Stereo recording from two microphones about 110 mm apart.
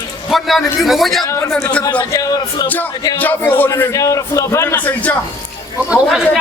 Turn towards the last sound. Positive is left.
turn(degrees=0)  # may be behind; listen again after turning